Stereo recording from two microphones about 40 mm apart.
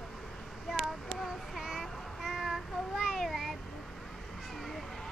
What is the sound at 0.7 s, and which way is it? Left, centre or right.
Child singing, centre.